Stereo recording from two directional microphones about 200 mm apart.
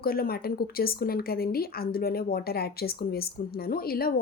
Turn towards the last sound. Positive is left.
turn(degrees=50)  # may be behind; listen again after turning